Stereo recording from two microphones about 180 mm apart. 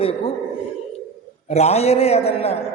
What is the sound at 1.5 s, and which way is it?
A man's voice, 35° left (ahead or behind).